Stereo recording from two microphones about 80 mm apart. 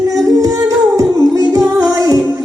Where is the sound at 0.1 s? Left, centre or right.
Right.